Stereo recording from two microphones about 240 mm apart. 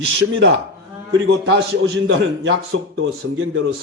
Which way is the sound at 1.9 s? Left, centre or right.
Right.